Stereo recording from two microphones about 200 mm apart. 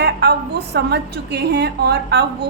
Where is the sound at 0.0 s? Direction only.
55° right (ahead or behind).